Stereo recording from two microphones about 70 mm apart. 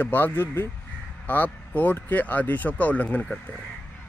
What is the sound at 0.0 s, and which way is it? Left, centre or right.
Speech, left.